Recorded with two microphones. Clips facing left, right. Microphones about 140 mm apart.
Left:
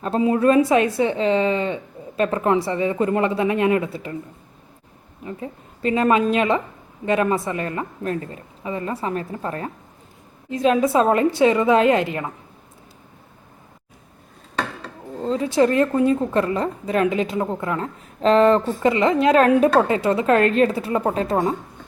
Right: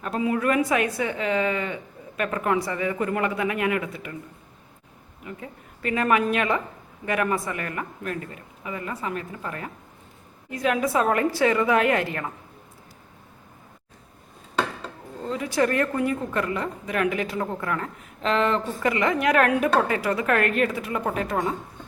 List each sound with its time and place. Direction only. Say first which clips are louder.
0.0 s speech: left 6 dB; 30° left (ahead or behind)
5.2 s speech: left 6 dB; 25° left (ahead or behind)
15.2 s speech: left 6 dB; 30° left (ahead or behind)
18.2 s speech: left 8 dB; 35° left (ahead or behind)
18.8 s speech: left 6 dB; 25° left (ahead or behind)